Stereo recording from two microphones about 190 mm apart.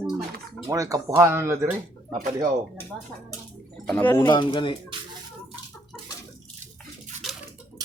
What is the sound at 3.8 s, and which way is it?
Speech, 10° left (ahead or behind).